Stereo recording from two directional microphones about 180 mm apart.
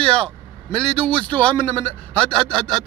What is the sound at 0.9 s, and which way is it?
Speech, 5° left (ahead or behind).